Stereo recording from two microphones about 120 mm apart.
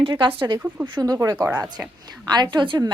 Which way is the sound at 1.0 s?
30° right (ahead or behind).